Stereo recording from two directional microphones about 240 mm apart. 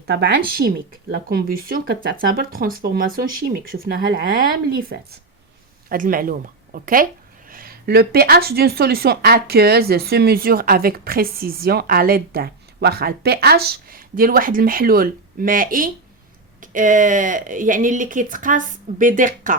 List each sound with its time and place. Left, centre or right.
0.1 s a woman's voice: right